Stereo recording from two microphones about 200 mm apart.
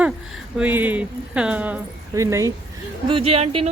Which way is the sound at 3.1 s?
30° right (ahead or behind).